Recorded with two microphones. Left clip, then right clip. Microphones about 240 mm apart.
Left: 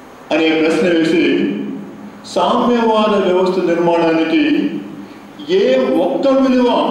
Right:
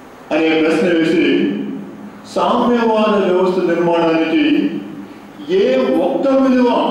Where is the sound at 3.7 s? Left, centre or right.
Centre.